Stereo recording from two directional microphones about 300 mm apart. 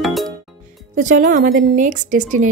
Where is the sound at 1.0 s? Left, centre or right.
Right.